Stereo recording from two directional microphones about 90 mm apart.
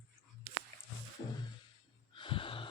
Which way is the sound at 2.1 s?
70° left (ahead or behind).